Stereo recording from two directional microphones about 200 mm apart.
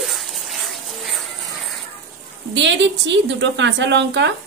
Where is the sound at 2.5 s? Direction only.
65° right (ahead or behind).